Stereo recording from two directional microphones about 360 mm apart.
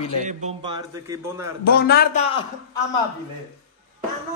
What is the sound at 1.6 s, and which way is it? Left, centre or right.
Speech, left.